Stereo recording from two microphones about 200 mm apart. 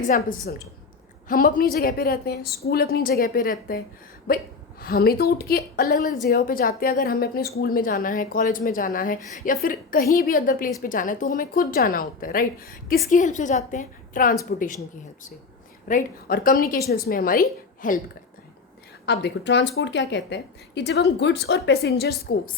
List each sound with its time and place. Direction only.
0.0 s a woman's voice: 45° left (ahead or behind)
15.9 s a woman's voice: 45° left (ahead or behind)
19.0 s a woman's voice: 55° left (ahead or behind)